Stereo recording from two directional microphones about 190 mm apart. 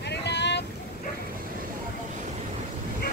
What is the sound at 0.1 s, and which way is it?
Boat, 65° left (ahead or behind).